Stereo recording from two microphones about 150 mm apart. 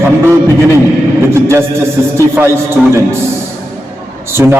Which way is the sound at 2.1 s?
15° right (ahead or behind).